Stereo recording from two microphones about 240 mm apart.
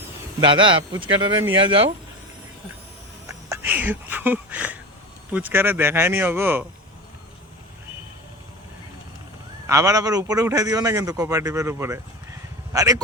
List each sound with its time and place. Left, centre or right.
0.3 s speech: right
3.2 s a sound: centre
5.3 s speech: centre
9.6 s a man's voice: centre